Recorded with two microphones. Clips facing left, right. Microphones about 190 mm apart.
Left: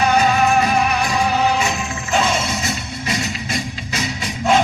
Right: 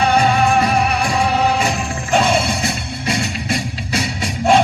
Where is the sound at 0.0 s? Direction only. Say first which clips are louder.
Right 1 dB; 30° right (ahead or behind).